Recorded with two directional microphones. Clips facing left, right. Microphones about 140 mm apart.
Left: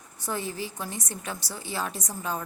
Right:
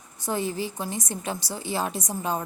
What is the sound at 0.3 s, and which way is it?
A woman's voice, 25° right (ahead or behind).